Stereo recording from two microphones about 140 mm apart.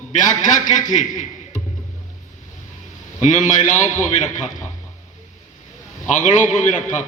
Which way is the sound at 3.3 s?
65° left (ahead or behind).